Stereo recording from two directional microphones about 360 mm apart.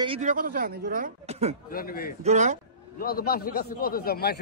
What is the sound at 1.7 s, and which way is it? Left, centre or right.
Speech, left.